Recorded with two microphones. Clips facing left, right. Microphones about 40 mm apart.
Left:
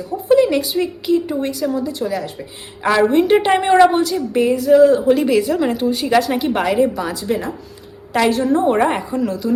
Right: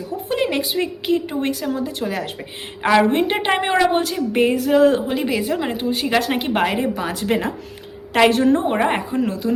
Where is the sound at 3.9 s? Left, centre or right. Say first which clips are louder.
Left 1 dB; right.